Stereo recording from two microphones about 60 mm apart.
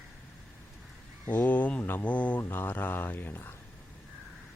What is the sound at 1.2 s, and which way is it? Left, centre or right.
A man's voice, left.